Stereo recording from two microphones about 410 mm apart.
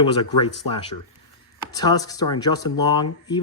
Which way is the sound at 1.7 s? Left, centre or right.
Centre.